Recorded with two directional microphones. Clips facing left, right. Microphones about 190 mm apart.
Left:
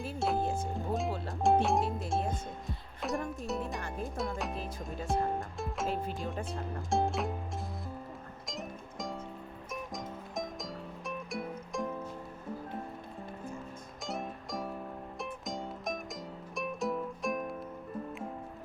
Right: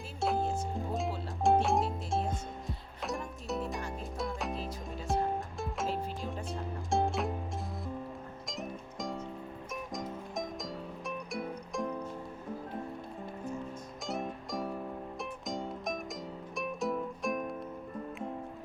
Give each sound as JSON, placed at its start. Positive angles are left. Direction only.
{"t": 0.2, "sound": "music", "side_deg": 0}
{"t": 8.4, "sound": "music", "side_deg": 0}
{"t": 14.1, "sound": "music", "side_deg": 0}